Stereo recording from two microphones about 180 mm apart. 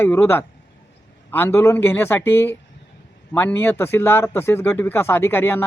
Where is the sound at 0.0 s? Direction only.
10° left (ahead or behind).